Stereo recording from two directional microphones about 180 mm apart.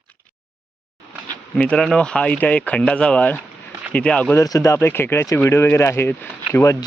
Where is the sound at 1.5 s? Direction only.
5° left (ahead or behind).